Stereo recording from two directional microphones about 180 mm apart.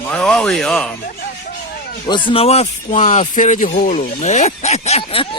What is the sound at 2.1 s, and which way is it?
Speech, 25° left (ahead or behind).